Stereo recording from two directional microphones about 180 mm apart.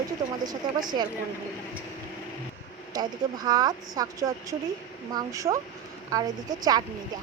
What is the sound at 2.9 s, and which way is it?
Speech, 20° right (ahead or behind).